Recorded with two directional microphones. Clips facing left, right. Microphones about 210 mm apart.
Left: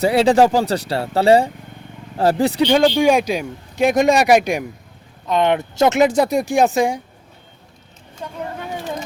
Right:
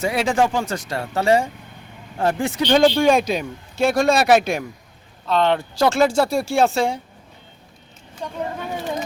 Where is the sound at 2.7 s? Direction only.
5° left (ahead or behind).